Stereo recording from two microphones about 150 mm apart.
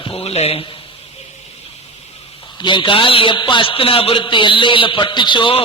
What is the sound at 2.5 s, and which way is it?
A man's voice, 30° left (ahead or behind).